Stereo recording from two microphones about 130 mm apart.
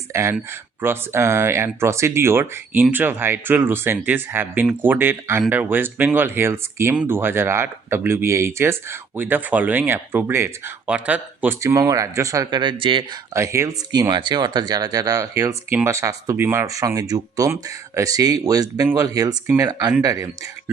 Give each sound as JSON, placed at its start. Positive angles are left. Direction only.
{"t": 0.1, "sound": "speech", "side_deg": -20}
{"t": 11.6, "sound": "speech", "side_deg": -25}
{"t": 13.3, "sound": "speech", "side_deg": -20}